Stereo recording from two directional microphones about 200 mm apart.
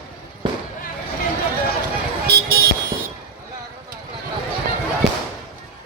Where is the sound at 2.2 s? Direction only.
50° right (ahead or behind).